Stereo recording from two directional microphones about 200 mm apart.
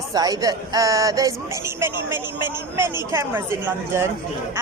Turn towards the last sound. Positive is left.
turn(degrees=-10)  # may be behind; listen again after turning